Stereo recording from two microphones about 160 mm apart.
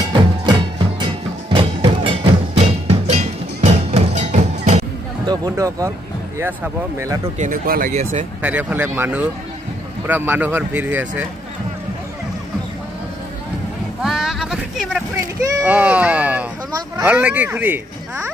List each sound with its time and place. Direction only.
0.1 s music: 30° right (ahead or behind); by 4.8 s 45° right (ahead or behind)
5.2 s speech: 25° right (ahead or behind)
7.3 s speech: 60° right (ahead or behind)
7.9 s speech: 50° right (ahead or behind)
8.4 s speech: 10° right (ahead or behind)
14.0 s sheep: 5° right (ahead or behind)
15.6 s speech: 10° right (ahead or behind)